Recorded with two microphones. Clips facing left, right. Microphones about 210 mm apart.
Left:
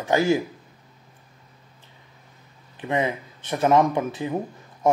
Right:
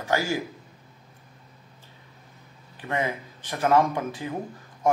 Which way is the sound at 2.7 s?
20° left (ahead or behind).